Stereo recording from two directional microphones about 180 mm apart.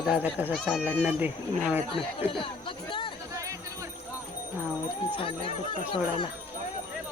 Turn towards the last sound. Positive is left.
turn(degrees=30)  # may be behind; listen again after turning